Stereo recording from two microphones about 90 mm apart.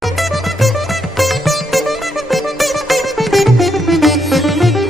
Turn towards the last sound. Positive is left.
turn(degrees=0)  # may be behind; listen again after turning